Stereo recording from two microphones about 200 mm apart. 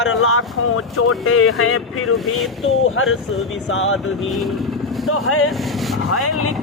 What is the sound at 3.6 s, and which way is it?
Speech, 75° left (ahead or behind).